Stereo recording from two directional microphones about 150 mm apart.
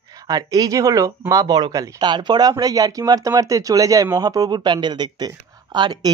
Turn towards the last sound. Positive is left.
turn(degrees=-30)  # may be behind; listen again after turning